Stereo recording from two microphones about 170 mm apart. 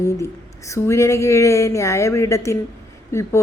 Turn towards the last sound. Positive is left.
turn(degrees=15)  # may be behind; listen again after turning